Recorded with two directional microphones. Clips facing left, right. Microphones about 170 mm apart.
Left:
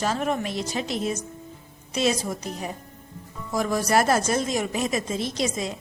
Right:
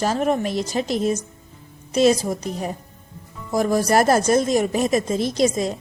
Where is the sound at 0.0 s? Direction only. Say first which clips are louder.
Right 5 dB; 40° right (ahead or behind).